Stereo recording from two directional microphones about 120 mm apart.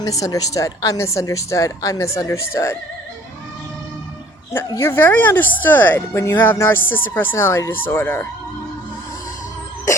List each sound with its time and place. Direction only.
0.0 s a woman's voice: 30° left (ahead or behind)
4.5 s speech: 20° left (ahead or behind)